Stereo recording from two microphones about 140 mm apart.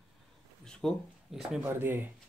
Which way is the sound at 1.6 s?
15° right (ahead or behind).